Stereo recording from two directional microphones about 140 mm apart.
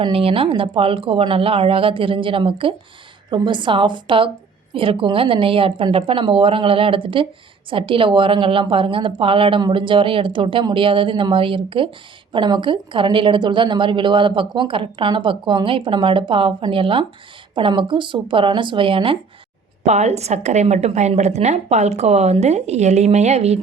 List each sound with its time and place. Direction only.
0.0 s a woman's voice: 40° right (ahead or behind)
19.8 s a woman's voice: 55° right (ahead or behind)